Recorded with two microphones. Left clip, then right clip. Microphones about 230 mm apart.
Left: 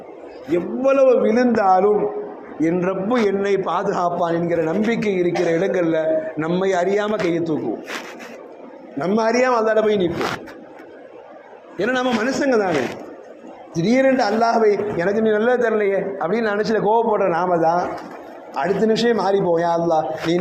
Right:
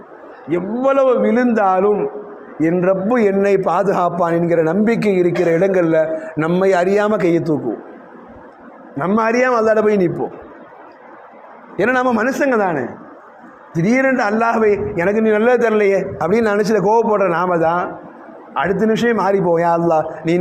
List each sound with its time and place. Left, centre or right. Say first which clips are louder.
0.5 s a man's voice: right 2 dB; right
1.1 s a man's voice: right 1 dB; right
1.5 s a man's voice: even; right
9.0 s a man's voice: right 2 dB; right
11.8 s a man's voice: right 5 dB; right
13.9 s a man's voice: right 1 dB; right
18.5 s a man's voice: right 2 dB; right
19.1 s a man's voice: right 3 dB; right